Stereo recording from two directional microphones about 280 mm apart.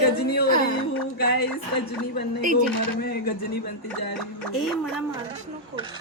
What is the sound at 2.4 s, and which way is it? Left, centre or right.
Speech, right.